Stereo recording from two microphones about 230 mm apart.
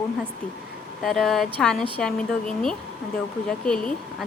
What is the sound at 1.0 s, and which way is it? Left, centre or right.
A woman's voice, centre.